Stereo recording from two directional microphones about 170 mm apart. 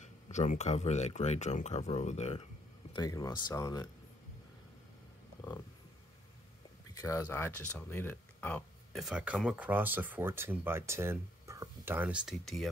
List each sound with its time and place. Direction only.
0.0 s speech: 45° left (ahead or behind)
2.9 s speech: 20° left (ahead or behind)
6.9 s speech: 20° left (ahead or behind)
8.9 s speech: 5° right (ahead or behind)